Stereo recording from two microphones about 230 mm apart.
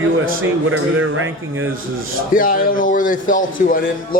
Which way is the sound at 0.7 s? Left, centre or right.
Right.